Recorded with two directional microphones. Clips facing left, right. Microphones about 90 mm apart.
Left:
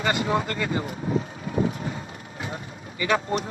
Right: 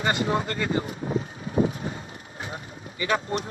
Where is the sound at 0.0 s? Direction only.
30° right (ahead or behind).